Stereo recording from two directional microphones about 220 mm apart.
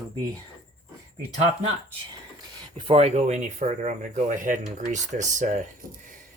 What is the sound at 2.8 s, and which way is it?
Speech, 25° right (ahead or behind).